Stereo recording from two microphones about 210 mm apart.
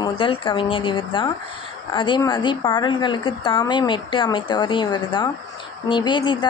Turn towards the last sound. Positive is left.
turn(degrees=20)  # may be behind; listen again after turning